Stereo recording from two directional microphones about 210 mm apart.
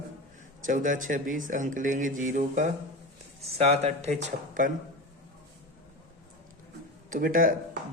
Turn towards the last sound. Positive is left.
turn(degrees=-40)  # may be behind; listen again after turning